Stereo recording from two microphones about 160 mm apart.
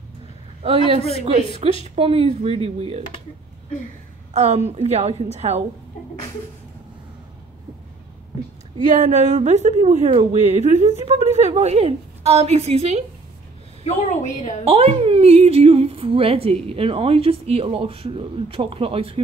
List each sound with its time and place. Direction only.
0.6 s a woman's voice: 40° right (ahead or behind)
4.3 s a woman's voice: 45° right (ahead or behind)
8.8 s a woman's voice: 45° right (ahead or behind)
13.8 s a woman's voice: 50° left (ahead or behind)
14.6 s a woman's voice: 40° right (ahead or behind)